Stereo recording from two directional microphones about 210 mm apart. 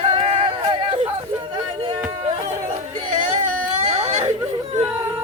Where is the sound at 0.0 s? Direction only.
30° right (ahead or behind).